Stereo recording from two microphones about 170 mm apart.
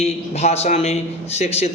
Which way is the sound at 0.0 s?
40° left (ahead or behind).